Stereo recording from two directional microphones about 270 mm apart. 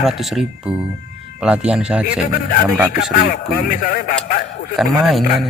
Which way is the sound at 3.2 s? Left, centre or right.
Left.